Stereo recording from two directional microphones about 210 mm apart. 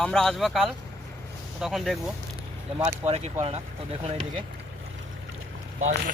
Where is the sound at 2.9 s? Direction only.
30° right (ahead or behind).